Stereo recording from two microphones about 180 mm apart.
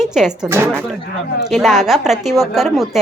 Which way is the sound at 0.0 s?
5° right (ahead or behind).